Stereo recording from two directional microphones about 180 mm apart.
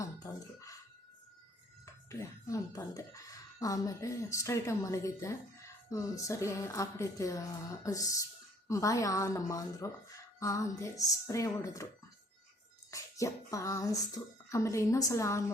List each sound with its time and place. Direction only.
0.0 s a sound: 20° left (ahead or behind)
1.8 s speech: 15° left (ahead or behind)
12.9 s speech: 20° left (ahead or behind)